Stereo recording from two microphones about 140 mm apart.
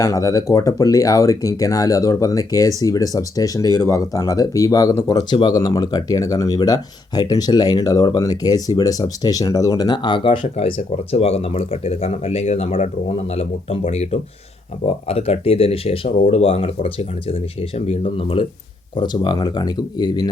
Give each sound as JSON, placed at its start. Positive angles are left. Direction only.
{"t": 0.0, "sound": "speech", "side_deg": 25}